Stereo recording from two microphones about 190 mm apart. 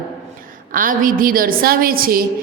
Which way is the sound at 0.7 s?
45° right (ahead or behind).